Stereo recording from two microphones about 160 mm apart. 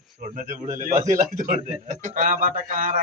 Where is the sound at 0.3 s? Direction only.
55° right (ahead or behind).